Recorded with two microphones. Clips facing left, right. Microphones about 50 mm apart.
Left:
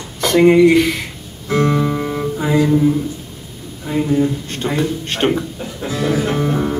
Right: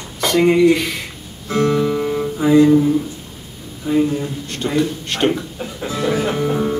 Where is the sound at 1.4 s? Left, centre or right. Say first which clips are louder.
Even; left.